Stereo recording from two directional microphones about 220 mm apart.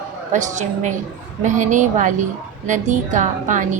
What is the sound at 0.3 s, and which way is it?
A woman's voice, 35° right (ahead or behind).